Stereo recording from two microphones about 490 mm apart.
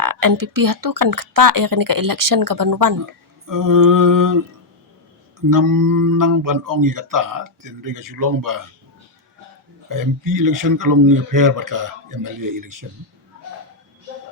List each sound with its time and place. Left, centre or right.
0.0 s mantra: right
5.5 s mantra: right
9.9 s mantra: right